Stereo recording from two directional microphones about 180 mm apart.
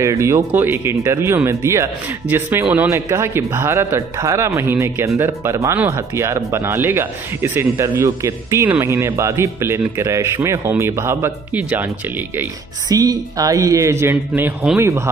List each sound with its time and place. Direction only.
0.0 s speech: 15° right (ahead or behind)